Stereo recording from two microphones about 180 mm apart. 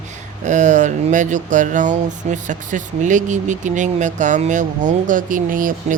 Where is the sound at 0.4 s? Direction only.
45° right (ahead or behind).